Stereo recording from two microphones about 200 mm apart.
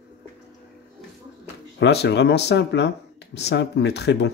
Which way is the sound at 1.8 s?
55° left (ahead or behind).